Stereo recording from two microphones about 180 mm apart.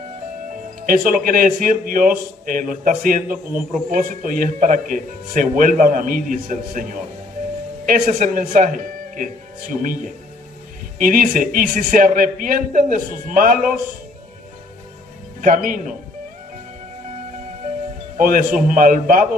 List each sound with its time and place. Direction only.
0.8 s speech: 50° right (ahead or behind)
15.4 s speech: 45° right (ahead or behind)
18.2 s speech: 50° right (ahead or behind)